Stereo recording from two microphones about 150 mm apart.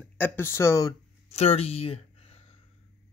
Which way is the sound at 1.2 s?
45° left (ahead or behind).